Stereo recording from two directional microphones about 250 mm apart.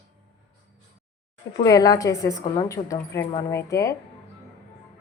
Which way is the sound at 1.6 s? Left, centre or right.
Centre.